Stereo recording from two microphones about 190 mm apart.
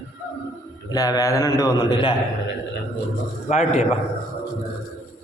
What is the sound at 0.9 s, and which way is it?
A man's voice, 15° left (ahead or behind).